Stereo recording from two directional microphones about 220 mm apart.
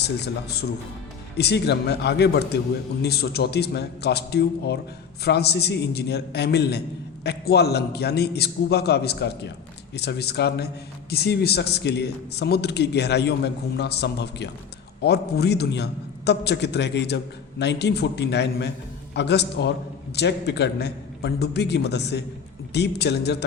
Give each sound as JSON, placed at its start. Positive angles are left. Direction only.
{"t": 0.0, "sound": "a man's voice", "side_deg": 50}